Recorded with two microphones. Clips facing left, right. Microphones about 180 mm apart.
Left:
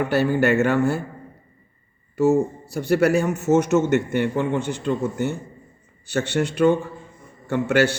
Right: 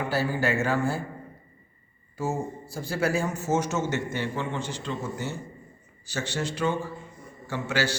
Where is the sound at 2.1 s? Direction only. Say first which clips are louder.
Left 12 dB; 70° left (ahead or behind).